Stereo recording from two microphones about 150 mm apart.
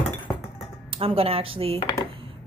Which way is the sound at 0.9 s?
40° right (ahead or behind).